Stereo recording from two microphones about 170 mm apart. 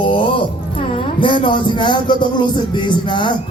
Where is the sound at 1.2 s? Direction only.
30° left (ahead or behind).